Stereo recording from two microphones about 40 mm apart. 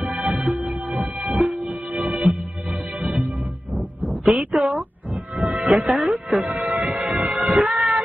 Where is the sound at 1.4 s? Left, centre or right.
Right.